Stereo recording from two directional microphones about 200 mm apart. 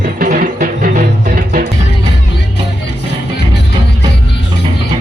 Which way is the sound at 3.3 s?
55° left (ahead or behind).